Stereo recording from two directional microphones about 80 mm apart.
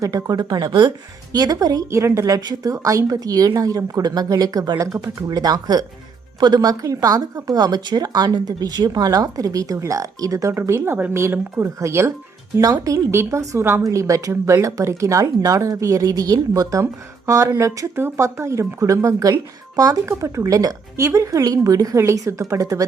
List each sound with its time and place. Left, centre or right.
0.0 s speech: right
0.7 s speech: right
1.3 s speech: right
1.9 s speech: right
12.6 s speech: right
13.1 s speech: right